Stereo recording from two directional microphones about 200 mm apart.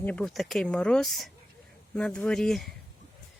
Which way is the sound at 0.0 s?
5° left (ahead or behind).